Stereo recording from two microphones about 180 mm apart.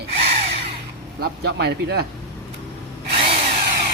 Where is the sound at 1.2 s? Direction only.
65° right (ahead or behind).